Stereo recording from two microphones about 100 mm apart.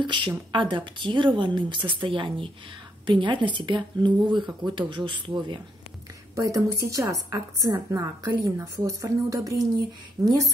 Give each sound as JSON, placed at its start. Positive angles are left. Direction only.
{"t": 0.0, "sound": "a woman's voice", "side_deg": -55}
{"t": 6.3, "sound": "a woman's voice", "side_deg": -35}